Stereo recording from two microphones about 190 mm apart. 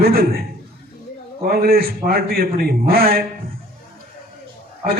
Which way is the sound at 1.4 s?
55° right (ahead or behind).